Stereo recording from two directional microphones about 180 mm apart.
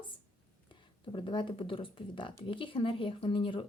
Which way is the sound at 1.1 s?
25° left (ahead or behind).